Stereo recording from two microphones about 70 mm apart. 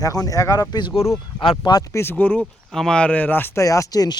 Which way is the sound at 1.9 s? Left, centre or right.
Left.